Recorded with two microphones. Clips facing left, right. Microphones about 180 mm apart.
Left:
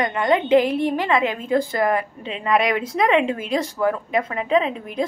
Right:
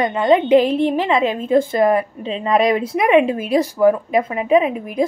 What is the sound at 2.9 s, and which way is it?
A woman's voice, 20° right (ahead or behind).